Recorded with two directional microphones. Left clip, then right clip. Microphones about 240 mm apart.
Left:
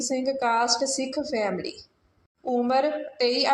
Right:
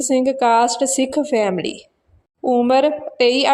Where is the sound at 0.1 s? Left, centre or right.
Right.